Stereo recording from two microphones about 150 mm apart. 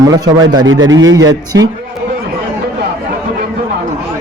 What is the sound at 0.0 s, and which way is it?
A man's voice, 25° right (ahead or behind).